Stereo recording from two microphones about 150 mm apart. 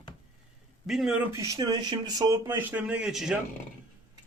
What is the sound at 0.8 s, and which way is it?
Speech, centre (ahead or behind).